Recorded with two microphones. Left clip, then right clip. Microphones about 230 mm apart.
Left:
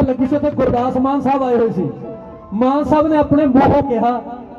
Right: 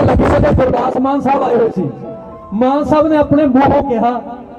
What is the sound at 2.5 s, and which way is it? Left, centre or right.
A man's voice, right.